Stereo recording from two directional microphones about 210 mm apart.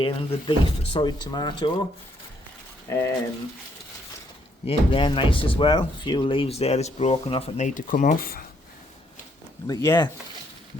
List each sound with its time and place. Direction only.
0.0 s speech: 25° left (ahead or behind)
2.8 s speech: 15° left (ahead or behind)
4.6 s speech: 25° left (ahead or behind); by 8.4 s 45° left (ahead or behind)
9.6 s speech: 15° left (ahead or behind)